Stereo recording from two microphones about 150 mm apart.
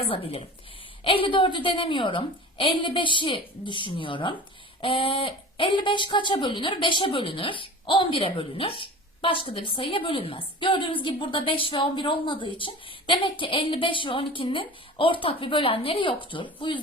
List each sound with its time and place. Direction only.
0.0 s speech: 40° left (ahead or behind)